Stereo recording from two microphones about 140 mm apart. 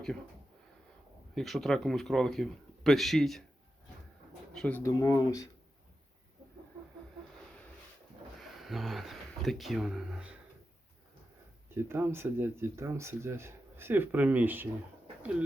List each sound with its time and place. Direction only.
1.4 s speech: centre (ahead or behind)
4.5 s speech: 5° left (ahead or behind)
4.8 s speech: 25° left (ahead or behind)
8.5 s speech: centre (ahead or behind)
11.7 s speech: 15° right (ahead or behind)